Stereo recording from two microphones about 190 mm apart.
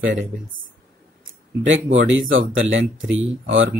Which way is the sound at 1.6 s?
80° right.